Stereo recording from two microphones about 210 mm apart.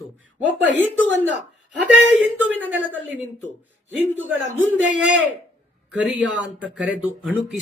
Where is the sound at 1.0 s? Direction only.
60° right (ahead or behind).